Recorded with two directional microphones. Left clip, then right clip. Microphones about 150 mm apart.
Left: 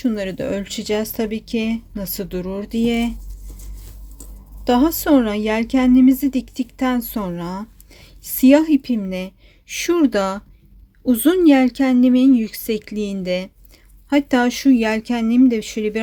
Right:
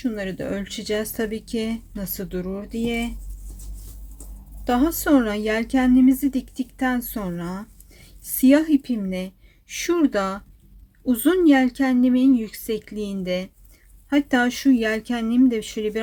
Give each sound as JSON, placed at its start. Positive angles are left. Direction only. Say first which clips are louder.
{"t": 0.0, "sound": "speech", "louder": "left 5 dB", "side_deg": 30}
{"t": 4.6, "sound": "speech", "louder": "left 4 dB", "side_deg": 25}